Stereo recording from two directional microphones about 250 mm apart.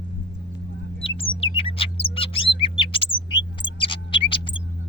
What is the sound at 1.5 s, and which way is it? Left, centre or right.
Chirp, left.